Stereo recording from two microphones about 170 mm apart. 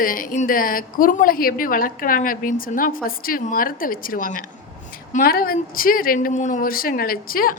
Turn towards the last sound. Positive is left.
turn(degrees=60)  # may be behind; listen again after turning